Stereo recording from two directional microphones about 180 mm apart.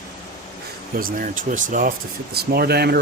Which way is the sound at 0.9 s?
50° right (ahead or behind).